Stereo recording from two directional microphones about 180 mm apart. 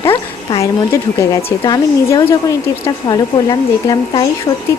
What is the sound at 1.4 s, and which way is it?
Speech, 35° left (ahead or behind).